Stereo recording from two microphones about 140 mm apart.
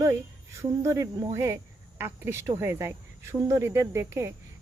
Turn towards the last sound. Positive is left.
turn(degrees=-20)  # may be behind; listen again after turning